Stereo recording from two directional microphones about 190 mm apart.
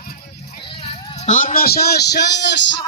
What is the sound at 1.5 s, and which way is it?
Speech, 55° left (ahead or behind).